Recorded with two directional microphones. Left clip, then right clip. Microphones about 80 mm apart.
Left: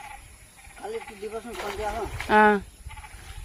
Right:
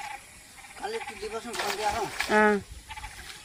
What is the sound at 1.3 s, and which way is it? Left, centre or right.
Speech, right.